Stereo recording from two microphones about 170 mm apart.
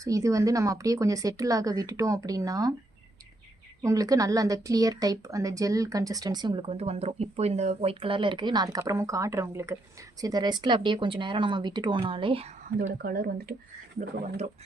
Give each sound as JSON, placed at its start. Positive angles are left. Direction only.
{"t": 0.0, "sound": "a woman's voice", "side_deg": -20}
{"t": 3.8, "sound": "a woman's voice", "side_deg": -20}
{"t": 13.0, "sound": "speech", "side_deg": -60}